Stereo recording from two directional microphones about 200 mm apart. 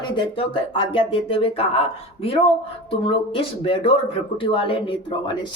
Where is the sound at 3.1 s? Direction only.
30° left (ahead or behind).